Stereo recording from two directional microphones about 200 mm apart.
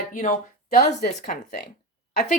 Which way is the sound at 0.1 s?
40° left (ahead or behind).